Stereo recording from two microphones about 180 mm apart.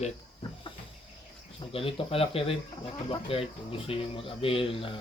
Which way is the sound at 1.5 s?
30° left (ahead or behind).